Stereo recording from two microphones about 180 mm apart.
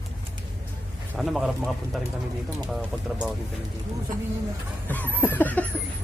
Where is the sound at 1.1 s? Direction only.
Centre (ahead or behind).